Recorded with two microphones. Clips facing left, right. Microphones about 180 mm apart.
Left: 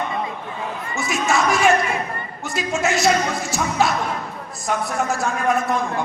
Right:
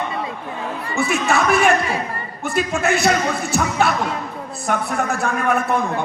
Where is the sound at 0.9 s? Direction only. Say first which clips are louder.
Right 2 dB; 60° right (ahead or behind).